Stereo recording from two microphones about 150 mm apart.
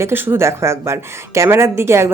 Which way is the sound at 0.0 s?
15° right (ahead or behind).